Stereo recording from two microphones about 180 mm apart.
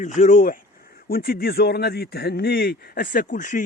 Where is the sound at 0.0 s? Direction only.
45° left (ahead or behind).